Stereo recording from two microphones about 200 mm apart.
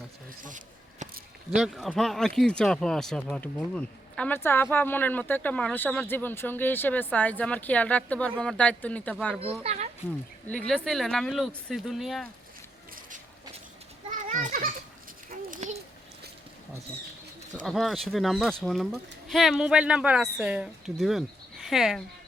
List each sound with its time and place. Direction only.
0.4 s a sound: 40° right (ahead or behind)
1.5 s speech: centre (ahead or behind)
9.4 s speech: 30° right (ahead or behind)
10.4 s speech: 5° left (ahead or behind)
14.1 s children playing: 40° right (ahead or behind)
15.3 s a sound: 40° right (ahead or behind)
17.6 s speech: centre (ahead or behind)